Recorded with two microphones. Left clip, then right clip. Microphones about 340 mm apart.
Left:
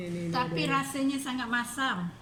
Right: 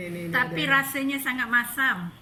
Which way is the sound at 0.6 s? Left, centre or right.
Centre.